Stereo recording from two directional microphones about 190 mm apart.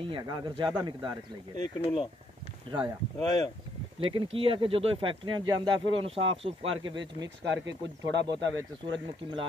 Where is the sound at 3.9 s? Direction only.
30° right (ahead or behind).